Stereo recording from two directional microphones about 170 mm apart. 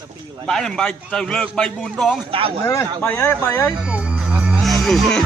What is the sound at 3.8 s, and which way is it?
Music, 5° right (ahead or behind).